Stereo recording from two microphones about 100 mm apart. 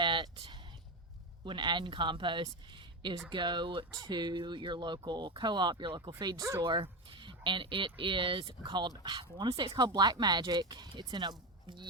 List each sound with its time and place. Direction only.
0.0 s a sound: 50° right (ahead or behind)
1.5 s speech: 50° right (ahead or behind)
3.9 s speech: 35° right (ahead or behind)
4.2 s speech: 50° right (ahead or behind)